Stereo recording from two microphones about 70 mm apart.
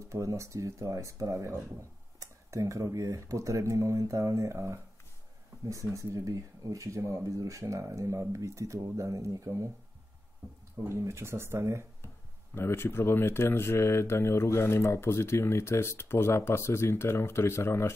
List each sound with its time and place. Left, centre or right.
0.1 s speech: right
10.8 s speech: right
12.5 s speech: left